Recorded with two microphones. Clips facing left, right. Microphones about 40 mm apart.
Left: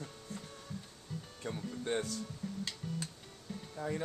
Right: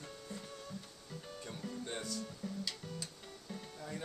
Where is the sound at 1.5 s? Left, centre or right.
Left.